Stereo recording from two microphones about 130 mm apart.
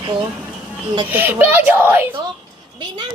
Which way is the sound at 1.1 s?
15° right (ahead or behind).